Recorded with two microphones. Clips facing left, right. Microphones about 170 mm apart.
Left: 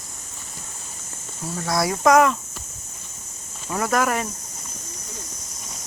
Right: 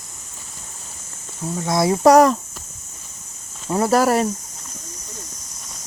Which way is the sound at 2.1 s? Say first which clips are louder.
Right 4 dB; 35° right (ahead or behind).